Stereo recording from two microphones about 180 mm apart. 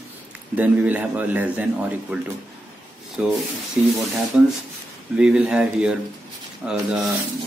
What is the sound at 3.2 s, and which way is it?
Speech, 5° right (ahead or behind).